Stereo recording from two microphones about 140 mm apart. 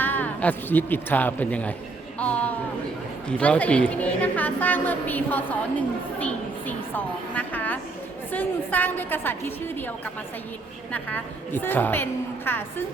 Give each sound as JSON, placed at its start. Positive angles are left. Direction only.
{"t": 0.0, "sound": "speech", "side_deg": 15}
{"t": 2.1, "sound": "a sound", "side_deg": 10}
{"t": 3.2, "sound": "a woman's voice", "side_deg": 5}
{"t": 10.9, "sound": "a woman's voice", "side_deg": 15}